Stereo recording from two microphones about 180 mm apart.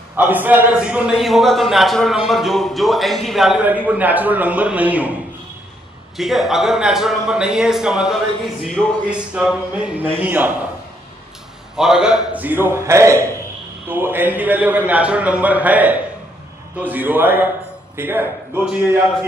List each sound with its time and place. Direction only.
0.1 s a man's voice: 10° right (ahead or behind)
6.1 s a man's voice: centre (ahead or behind)
11.7 s a man's voice: 5° right (ahead or behind)